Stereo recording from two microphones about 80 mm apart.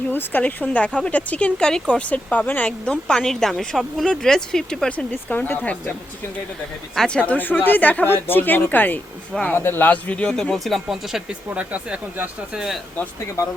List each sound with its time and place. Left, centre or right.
0.1 s speech: left
5.1 s speech: left
6.9 s speech: centre
7.2 s speech: centre
12.5 s speech: centre